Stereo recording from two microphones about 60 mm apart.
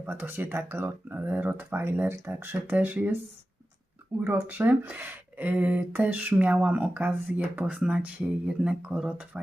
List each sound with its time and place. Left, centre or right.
0.0 s speech: right
2.5 s speech: right
4.2 s speech: right
7.6 s speech: centre